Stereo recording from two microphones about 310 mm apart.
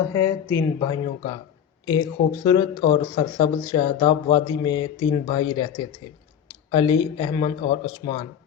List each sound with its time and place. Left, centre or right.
0.1 s speech: centre